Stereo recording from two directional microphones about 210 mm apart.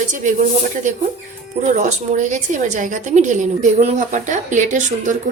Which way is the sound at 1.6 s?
35° right (ahead or behind).